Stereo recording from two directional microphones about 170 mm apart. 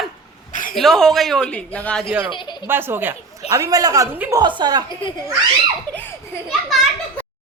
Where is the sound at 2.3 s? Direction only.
25° left (ahead or behind).